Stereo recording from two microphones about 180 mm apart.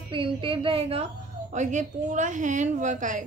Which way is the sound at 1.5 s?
45° right (ahead or behind).